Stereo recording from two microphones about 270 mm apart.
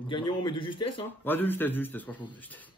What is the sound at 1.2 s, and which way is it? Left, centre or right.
Speech, centre.